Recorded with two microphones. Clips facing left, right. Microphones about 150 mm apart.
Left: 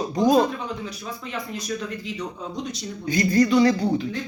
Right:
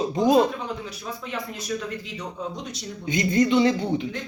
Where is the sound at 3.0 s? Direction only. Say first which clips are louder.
Left 2 dB; 20° right (ahead or behind).